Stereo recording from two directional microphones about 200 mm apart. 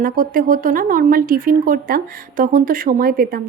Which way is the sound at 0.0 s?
45° right (ahead or behind).